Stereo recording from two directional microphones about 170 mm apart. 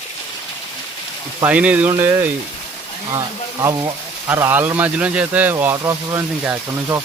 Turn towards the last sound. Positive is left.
turn(degrees=-15)  # may be behind; listen again after turning